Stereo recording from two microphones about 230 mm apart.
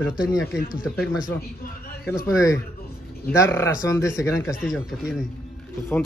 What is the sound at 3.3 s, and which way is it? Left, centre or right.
Speech, centre.